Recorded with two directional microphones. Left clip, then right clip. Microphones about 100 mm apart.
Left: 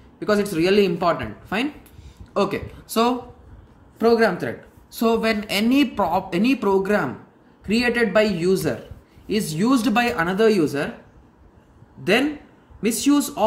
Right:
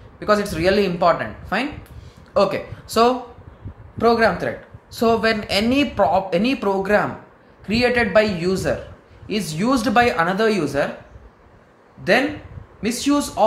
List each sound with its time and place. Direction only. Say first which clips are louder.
0.2 s speech: right 2 dB; 30° left (ahead or behind)
12.8 s speech: even; 55° left (ahead or behind)